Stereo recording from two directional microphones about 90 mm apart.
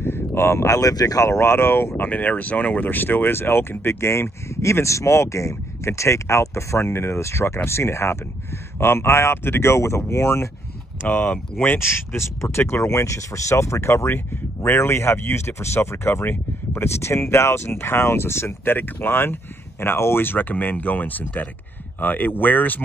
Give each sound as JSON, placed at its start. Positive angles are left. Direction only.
{"t": 0.0, "sound": "speech", "side_deg": 25}
{"t": 11.0, "sound": "speech", "side_deg": 15}
{"t": 11.6, "sound": "speech", "side_deg": 25}